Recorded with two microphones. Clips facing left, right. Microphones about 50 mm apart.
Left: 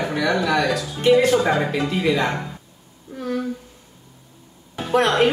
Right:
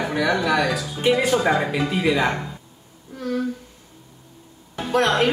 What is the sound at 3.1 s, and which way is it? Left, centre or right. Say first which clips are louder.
Speech: left 1 dB; centre.